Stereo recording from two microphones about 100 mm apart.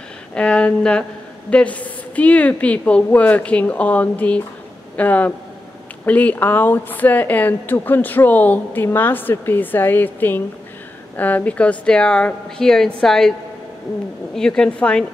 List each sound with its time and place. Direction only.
0.3 s a woman's voice: 10° left (ahead or behind)
14.3 s a woman's voice: 5° left (ahead or behind)